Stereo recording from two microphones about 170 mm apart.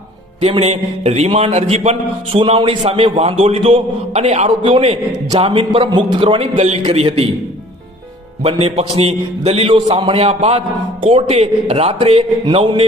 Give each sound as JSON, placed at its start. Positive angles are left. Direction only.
{"t": 0.4, "sound": "a man's voice", "side_deg": -35}
{"t": 8.4, "sound": "a man's voice", "side_deg": -35}